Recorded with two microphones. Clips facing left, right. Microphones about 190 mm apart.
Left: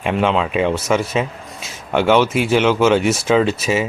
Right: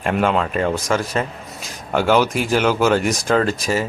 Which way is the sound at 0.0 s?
Centre (ahead or behind).